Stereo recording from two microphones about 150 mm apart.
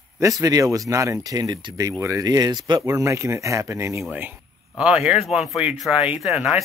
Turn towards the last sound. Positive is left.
turn(degrees=-5)  # may be behind; listen again after turning